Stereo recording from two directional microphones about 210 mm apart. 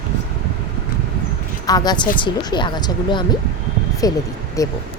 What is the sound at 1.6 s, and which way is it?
Speech, 20° left (ahead or behind).